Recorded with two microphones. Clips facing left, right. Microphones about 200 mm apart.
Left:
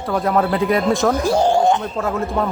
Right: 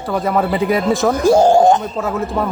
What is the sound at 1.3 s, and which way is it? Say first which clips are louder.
Speech: right 7 dB; 45° right (ahead or behind).